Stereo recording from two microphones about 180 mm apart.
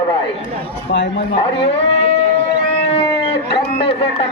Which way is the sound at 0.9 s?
75° left (ahead or behind).